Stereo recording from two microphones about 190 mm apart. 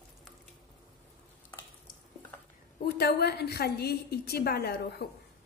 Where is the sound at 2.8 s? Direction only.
55° left (ahead or behind).